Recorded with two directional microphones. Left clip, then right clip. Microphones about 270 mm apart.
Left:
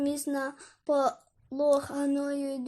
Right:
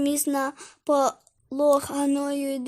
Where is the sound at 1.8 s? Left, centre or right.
Right.